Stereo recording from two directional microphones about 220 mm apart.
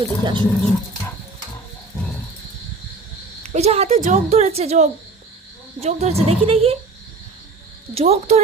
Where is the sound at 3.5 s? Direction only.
30° right (ahead or behind).